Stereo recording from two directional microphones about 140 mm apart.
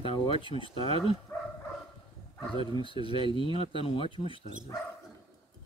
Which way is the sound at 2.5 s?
40° left (ahead or behind).